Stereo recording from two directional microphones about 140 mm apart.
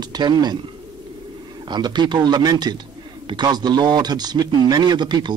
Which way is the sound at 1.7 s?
30° right (ahead or behind).